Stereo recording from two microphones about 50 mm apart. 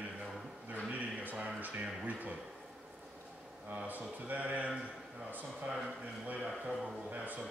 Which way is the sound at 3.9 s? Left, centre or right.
Right.